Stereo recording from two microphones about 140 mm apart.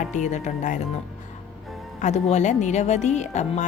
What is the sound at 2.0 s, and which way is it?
A woman's voice, 55° left (ahead or behind).